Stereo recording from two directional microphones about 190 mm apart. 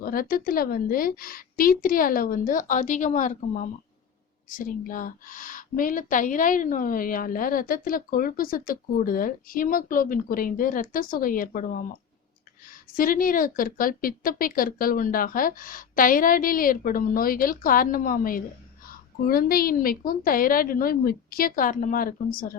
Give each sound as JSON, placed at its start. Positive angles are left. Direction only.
{"t": 0.0, "sound": "a woman's voice", "side_deg": 50}